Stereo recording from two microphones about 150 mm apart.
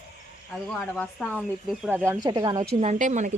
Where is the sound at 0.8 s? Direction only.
5° left (ahead or behind).